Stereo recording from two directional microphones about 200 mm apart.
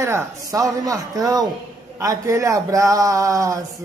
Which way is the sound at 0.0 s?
15° right (ahead or behind).